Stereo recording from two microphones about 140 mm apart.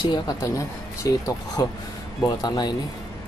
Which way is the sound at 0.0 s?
30° left (ahead or behind).